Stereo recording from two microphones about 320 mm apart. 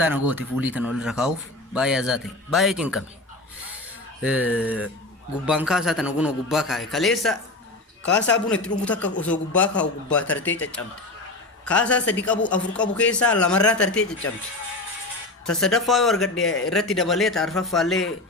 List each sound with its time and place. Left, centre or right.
0.0 s a man's voice: centre
4.2 s a man's voice: centre
8.0 s a man's voice: left
8.4 s a man's voice: centre
11.6 s a man's voice: centre
15.4 s a man's voice: centre